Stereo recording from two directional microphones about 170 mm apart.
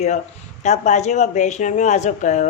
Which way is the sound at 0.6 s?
45° left (ahead or behind).